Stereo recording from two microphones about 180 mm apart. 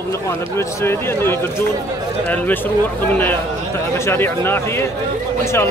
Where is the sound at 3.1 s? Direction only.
10° left (ahead or behind).